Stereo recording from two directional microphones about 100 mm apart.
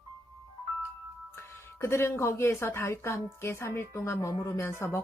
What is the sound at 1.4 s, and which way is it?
Speech, 25° left (ahead or behind).